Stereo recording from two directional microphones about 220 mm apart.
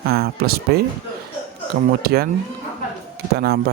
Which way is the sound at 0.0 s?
45° right (ahead or behind).